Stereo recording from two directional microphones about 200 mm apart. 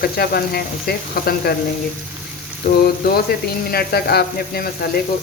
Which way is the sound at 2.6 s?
55° left (ahead or behind).